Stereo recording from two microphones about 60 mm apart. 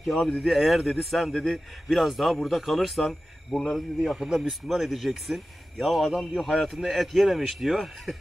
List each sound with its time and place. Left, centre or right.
0.4 s speech: centre